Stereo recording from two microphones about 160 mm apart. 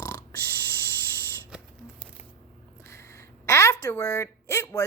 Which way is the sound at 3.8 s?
20° left (ahead or behind).